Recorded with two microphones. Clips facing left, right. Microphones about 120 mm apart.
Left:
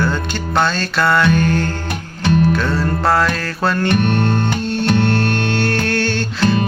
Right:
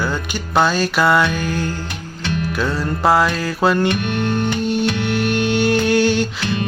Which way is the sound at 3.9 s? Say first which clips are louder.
Left 4 dB; 55° left (ahead or behind).